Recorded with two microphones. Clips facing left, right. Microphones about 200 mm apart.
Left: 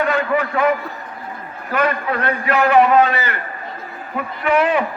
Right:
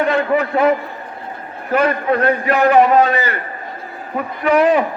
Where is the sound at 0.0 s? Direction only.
25° right (ahead or behind).